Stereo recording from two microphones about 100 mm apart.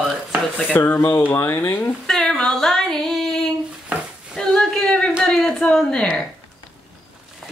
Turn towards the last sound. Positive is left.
turn(degrees=10)  # may be behind; listen again after turning